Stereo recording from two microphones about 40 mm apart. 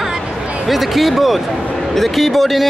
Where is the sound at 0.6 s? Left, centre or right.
Centre.